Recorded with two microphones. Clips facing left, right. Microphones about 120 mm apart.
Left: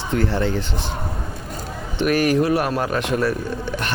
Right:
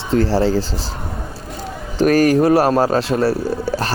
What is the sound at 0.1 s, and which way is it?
Speech, 30° right (ahead or behind).